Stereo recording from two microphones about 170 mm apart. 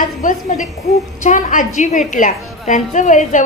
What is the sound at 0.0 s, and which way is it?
A woman's voice, 50° left (ahead or behind).